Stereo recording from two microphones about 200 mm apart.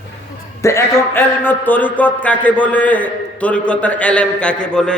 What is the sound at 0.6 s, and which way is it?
A man's voice, 15° left (ahead or behind).